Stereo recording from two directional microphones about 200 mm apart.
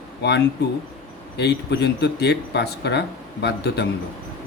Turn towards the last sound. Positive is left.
turn(degrees=55)  # may be behind; listen again after turning